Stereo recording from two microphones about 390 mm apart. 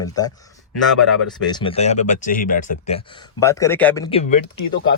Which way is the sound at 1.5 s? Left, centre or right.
Centre.